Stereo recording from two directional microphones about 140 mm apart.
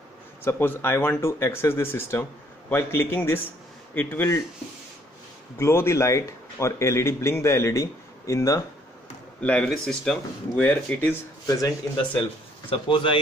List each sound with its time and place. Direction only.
0.4 s speech: 15° left (ahead or behind)
5.6 s a man's voice: 20° left (ahead or behind)
9.4 s speech: 10° left (ahead or behind)
11.4 s a man's voice: 25° left (ahead or behind)
12.6 s speech: 35° left (ahead or behind)